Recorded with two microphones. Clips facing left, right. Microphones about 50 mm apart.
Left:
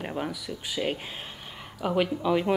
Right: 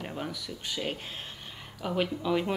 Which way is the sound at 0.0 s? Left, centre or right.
Centre.